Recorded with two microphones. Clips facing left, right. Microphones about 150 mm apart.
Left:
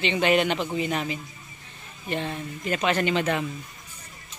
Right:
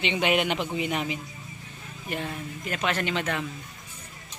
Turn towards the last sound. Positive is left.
turn(degrees=5)  # may be behind; listen again after turning